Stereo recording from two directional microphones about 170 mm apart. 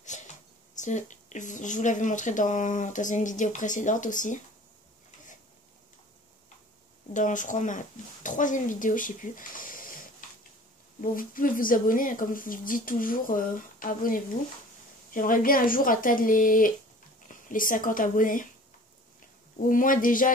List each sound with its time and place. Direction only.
0.1 s a sound: 45° left (ahead or behind)
0.7 s speech: 45° left (ahead or behind)
7.2 s speech: 50° left (ahead or behind)
19.7 s speech: 50° left (ahead or behind)